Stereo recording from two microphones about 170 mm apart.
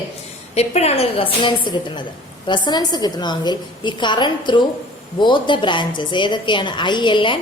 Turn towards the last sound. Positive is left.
turn(degrees=30)  # may be behind; listen again after turning